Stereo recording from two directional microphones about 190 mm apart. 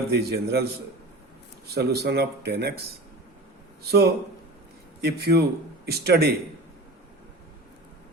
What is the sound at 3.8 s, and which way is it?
A man's voice, 55° right (ahead or behind).